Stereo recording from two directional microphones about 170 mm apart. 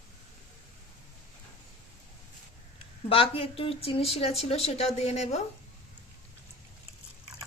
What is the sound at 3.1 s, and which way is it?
Speech, 35° left (ahead or behind).